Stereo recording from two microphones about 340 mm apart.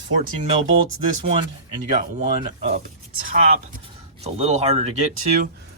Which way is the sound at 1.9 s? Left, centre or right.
Centre.